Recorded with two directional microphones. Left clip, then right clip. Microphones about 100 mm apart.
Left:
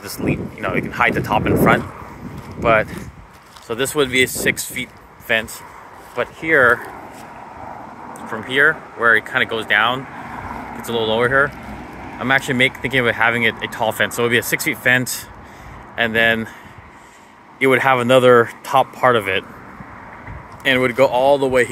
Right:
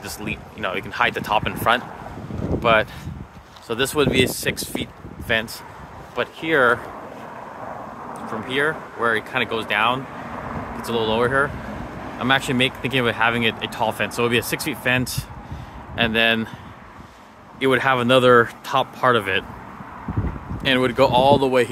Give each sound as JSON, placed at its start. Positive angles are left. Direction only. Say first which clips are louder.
{"t": 0.0, "sound": "speech", "louder": "left 6 dB", "side_deg": 0}
{"t": 0.6, "sound": "speech", "louder": "left 2 dB", "side_deg": -15}
{"t": 2.6, "sound": "speech", "louder": "left 2 dB", "side_deg": -20}
{"t": 6.1, "sound": "speech", "louder": "left 4 dB", "side_deg": -20}
{"t": 8.3, "sound": "speech", "louder": "left 7 dB", "side_deg": 0}
{"t": 17.6, "sound": "speech", "louder": "left 4 dB", "side_deg": 10}
{"t": 20.6, "sound": "speech", "louder": "left 3 dB", "side_deg": -10}